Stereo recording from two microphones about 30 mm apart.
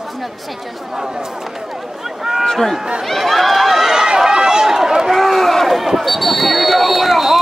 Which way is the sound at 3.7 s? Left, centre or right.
Centre.